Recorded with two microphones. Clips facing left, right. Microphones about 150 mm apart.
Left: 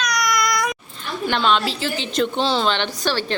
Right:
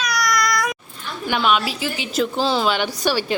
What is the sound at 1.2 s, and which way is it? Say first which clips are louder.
A woman's voice: even; 10° right (ahead or behind).